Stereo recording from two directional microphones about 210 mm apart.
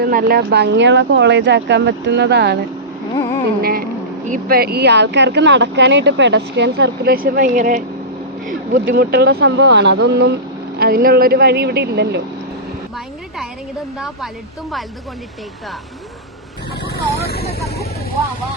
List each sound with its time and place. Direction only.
0.0 s speech: 45° right (ahead or behind)
3.6 s speech: 45° right (ahead or behind)
8.9 s speech: 50° right (ahead or behind)
13.4 s a woman's voice: centre (ahead or behind)
16.8 s vehicle: 50° left (ahead or behind)